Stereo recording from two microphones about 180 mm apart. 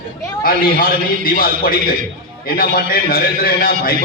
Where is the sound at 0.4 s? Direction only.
50° left (ahead or behind).